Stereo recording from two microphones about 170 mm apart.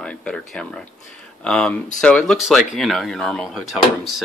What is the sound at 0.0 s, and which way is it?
Speech, 5° left (ahead or behind).